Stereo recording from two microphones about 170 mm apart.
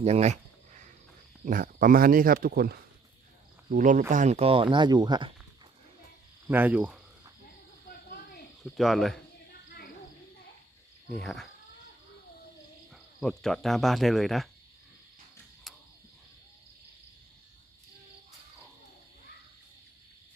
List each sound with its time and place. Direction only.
0.0 s a sound: 40° right (ahead or behind)
1.5 s speech: 55° right (ahead or behind)
3.7 s speech: 50° right (ahead or behind); by 5.3 s 25° right (ahead or behind)
6.5 s cricket: 10° right (ahead or behind)
8.6 s speech: centre (ahead or behind)
11.2 s speech: centre (ahead or behind)
12.9 s speech: centre (ahead or behind)
15.7 s a sound: centre (ahead or behind)